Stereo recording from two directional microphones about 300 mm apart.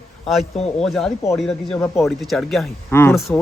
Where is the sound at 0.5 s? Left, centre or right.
Centre.